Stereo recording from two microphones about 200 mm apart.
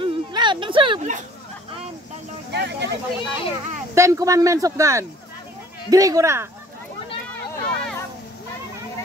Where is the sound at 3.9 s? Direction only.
15° right (ahead or behind).